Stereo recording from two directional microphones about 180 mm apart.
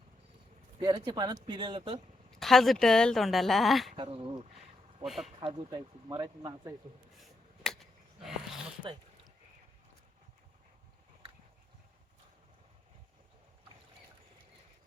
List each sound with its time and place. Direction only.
0.8 s speech: 25° right (ahead or behind)
2.4 s speech: centre (ahead or behind)
3.9 s speech: 30° right (ahead or behind)
5.0 s speech: centre (ahead or behind)
5.4 s speech: 25° right (ahead or behind)
7.2 s a sound: centre (ahead or behind)
8.8 s a sound: 25° right (ahead or behind)